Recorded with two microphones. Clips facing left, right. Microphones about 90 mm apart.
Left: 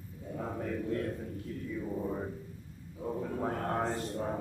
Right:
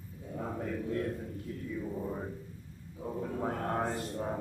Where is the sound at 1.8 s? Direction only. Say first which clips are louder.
Left 3 dB; 5° left (ahead or behind).